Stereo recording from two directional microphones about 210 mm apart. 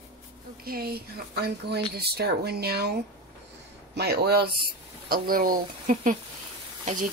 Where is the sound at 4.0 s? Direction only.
50° right (ahead or behind).